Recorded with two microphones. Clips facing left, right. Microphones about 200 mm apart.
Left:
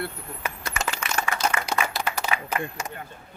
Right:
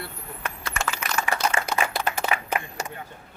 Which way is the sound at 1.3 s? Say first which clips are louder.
Right 2 dB; 20° right (ahead or behind).